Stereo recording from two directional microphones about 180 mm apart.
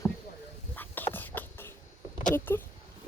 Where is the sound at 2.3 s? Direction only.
10° left (ahead or behind).